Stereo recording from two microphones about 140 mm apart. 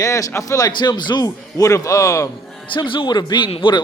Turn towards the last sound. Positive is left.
turn(degrees=35)  # may be behind; listen again after turning